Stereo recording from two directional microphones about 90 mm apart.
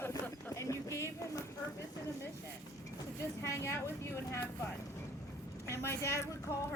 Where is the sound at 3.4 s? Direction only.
30° left (ahead or behind).